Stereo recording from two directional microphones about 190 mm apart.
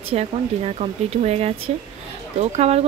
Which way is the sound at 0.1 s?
35° right (ahead or behind).